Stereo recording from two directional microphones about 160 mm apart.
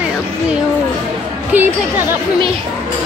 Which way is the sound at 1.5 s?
10° right (ahead or behind).